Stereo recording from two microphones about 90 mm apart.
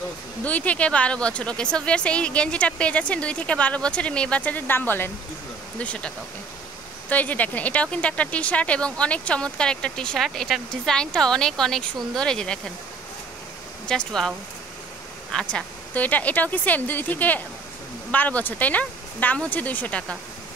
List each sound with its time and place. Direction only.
0.5 s speech: 15° left (ahead or behind)
5.8 s speech: 15° left (ahead or behind)
13.8 s speech: 5° left (ahead or behind)
15.3 s speech: 10° left (ahead or behind)